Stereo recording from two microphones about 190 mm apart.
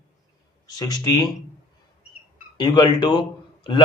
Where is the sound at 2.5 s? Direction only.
20° left (ahead or behind).